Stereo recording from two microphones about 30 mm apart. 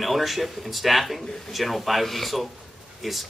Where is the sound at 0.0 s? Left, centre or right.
Centre.